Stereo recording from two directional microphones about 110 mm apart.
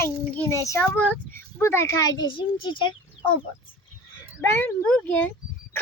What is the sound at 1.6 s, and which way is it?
Speech, 25° left (ahead or behind).